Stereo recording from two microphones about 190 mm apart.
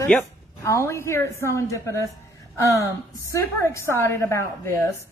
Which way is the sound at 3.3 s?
15° left (ahead or behind).